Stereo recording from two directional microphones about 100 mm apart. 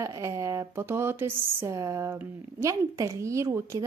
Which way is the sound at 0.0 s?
35° right (ahead or behind).